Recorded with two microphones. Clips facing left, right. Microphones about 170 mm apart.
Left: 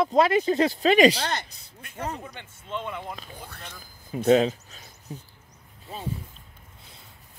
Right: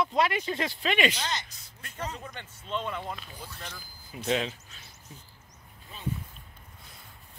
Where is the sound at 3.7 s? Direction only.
40° left (ahead or behind).